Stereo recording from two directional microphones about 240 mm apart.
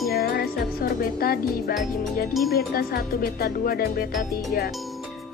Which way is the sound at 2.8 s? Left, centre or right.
Left.